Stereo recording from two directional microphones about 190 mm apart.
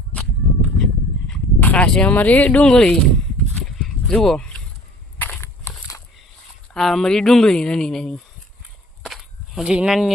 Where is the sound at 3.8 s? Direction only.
5° left (ahead or behind).